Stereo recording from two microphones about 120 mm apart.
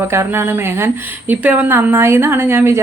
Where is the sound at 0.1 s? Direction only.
20° right (ahead or behind).